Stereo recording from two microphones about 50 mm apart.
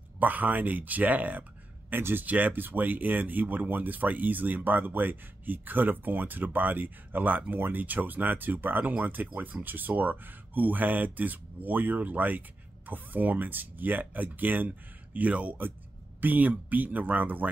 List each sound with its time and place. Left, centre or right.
0.2 s speech: right
1.9 s speech: right
2.2 s speech: right
15.1 s speech: right